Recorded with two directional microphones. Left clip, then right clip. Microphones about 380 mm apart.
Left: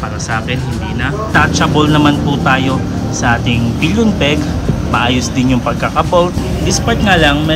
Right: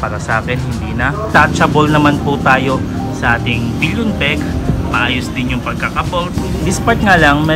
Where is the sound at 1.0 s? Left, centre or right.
Centre.